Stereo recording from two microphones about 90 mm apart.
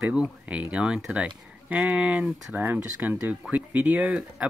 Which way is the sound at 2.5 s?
20° right (ahead or behind).